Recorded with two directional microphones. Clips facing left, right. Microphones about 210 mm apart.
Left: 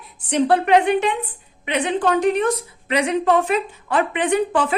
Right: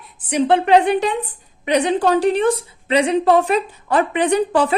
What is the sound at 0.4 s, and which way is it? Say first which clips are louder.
A woman's voice: right 2 dB; 25° right (ahead or behind).